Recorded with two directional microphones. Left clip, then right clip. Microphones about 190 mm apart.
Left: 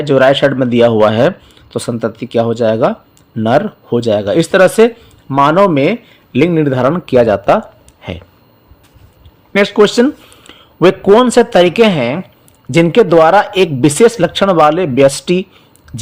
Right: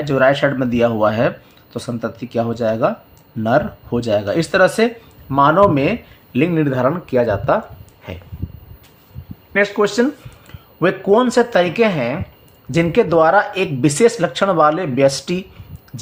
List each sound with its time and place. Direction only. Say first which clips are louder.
0.0 s speech: left 6 dB; 40° left (ahead or behind)
7.3 s speech: left 6 dB; 35° left (ahead or behind)
9.5 s speech: left 6 dB; 45° left (ahead or behind)